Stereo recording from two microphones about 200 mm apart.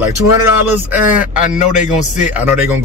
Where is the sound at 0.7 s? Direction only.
10° right (ahead or behind).